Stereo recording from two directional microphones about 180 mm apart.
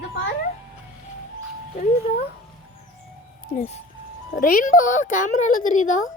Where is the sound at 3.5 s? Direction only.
55° left (ahead or behind).